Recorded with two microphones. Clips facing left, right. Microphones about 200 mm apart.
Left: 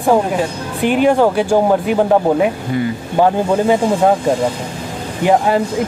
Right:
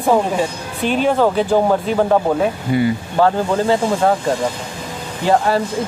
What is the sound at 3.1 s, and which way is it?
Speech, 15° left (ahead or behind).